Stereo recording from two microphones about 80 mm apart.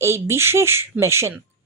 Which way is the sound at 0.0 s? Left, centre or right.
Right.